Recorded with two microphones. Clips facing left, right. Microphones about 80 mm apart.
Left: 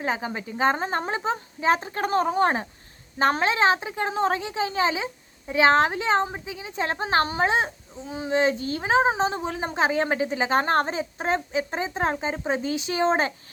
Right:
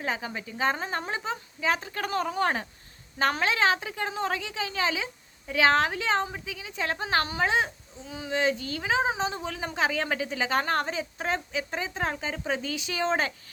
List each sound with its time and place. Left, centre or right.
0.0 s a woman's voice: left